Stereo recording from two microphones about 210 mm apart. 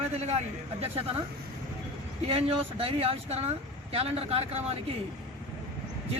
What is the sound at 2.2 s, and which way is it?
Speech, 25° right (ahead or behind).